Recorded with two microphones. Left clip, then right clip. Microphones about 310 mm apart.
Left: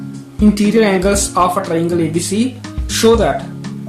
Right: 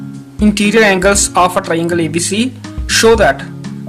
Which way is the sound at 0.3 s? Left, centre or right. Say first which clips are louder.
Right 3 dB; right.